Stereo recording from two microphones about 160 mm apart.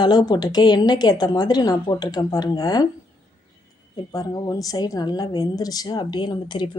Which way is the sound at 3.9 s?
25° left (ahead or behind).